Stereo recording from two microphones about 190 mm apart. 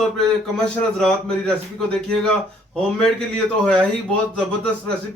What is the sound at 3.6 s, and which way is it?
Speech, 5° left (ahead or behind).